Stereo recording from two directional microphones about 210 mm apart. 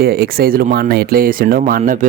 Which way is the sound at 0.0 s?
45° right (ahead or behind).